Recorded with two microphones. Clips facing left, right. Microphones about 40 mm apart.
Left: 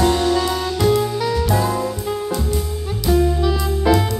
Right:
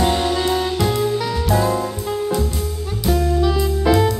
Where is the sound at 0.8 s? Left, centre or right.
Centre.